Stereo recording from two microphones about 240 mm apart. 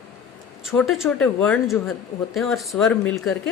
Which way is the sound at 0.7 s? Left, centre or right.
Centre.